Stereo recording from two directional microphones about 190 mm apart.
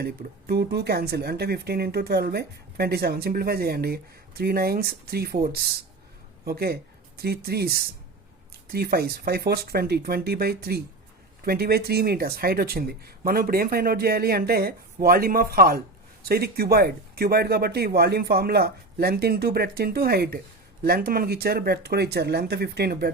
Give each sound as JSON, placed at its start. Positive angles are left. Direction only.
{"t": 0.0, "sound": "speech", "side_deg": -55}